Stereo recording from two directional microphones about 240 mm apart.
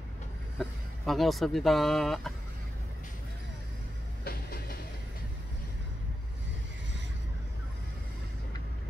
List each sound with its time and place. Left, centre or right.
0.6 s speech: centre
4.2 s train: left